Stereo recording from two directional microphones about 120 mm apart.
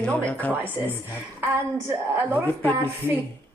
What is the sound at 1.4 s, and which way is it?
A woman's voice, 20° right (ahead or behind).